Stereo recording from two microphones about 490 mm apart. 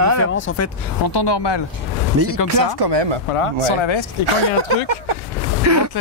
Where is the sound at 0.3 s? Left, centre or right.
Left.